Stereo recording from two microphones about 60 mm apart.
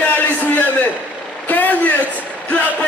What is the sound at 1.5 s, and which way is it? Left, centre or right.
Speech, left.